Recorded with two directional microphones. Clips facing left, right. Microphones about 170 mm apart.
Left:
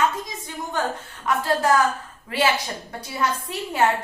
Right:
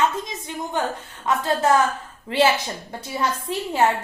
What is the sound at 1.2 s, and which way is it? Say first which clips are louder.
A woman's voice: right 1 dB; 20° right (ahead or behind).